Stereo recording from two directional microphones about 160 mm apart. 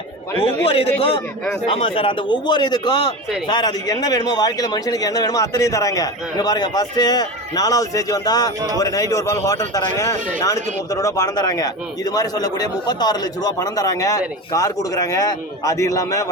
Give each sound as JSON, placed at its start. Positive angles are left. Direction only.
{"t": 0.4, "sound": "a man's voice", "side_deg": 40}